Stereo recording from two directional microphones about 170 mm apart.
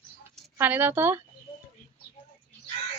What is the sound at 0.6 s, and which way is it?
Speech, 10° right (ahead or behind).